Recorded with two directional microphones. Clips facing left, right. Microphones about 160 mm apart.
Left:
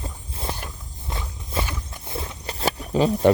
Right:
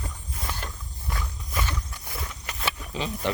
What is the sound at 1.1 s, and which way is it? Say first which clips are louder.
Walk: left 2 dB; 25° left (ahead or behind).